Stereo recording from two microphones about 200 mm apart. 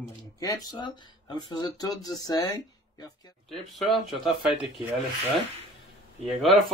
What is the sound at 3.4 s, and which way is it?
Speech, centre (ahead or behind).